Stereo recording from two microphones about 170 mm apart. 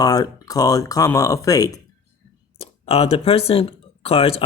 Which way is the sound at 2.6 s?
35° left (ahead or behind).